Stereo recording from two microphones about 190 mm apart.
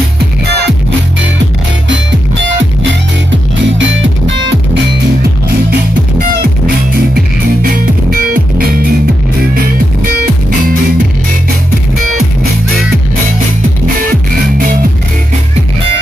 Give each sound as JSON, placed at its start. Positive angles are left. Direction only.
{"t": 3.3, "sound": "music", "side_deg": -80}
{"t": 7.6, "sound": "music", "side_deg": -50}